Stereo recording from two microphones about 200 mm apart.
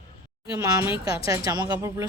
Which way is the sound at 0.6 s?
15° right (ahead or behind).